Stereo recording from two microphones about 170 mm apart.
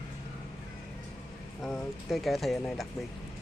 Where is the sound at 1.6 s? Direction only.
Centre (ahead or behind).